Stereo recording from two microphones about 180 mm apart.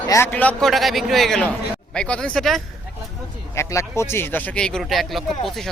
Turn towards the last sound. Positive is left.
turn(degrees=0)  # may be behind; listen again after turning